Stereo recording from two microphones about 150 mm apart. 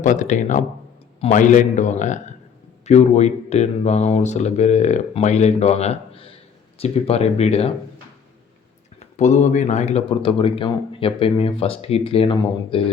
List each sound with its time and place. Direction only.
0.0 s a man's voice: 55° left (ahead or behind)
9.1 s a man's voice: 50° left (ahead or behind)